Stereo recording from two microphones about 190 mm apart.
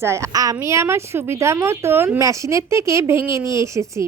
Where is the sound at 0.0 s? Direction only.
15° right (ahead or behind).